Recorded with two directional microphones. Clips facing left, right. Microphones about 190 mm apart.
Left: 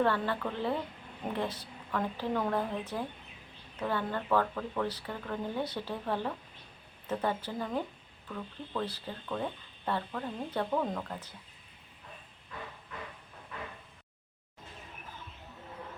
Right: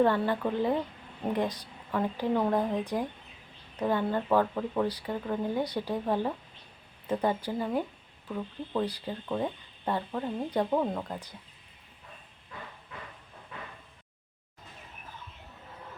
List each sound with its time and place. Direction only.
0.0 s speech: 15° right (ahead or behind)